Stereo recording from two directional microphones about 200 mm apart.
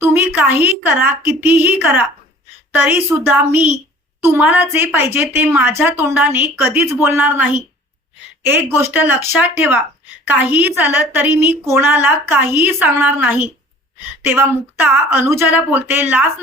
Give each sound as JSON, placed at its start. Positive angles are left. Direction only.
{"t": 0.0, "sound": "a woman's voice", "side_deg": -10}